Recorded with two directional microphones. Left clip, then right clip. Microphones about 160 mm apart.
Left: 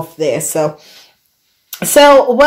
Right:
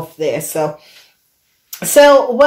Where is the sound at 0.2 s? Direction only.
35° left (ahead or behind).